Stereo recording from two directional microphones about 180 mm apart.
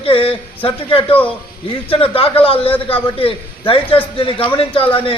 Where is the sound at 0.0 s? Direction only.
30° left (ahead or behind).